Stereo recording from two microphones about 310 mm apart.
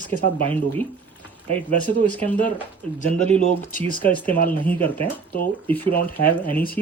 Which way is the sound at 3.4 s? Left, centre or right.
Left.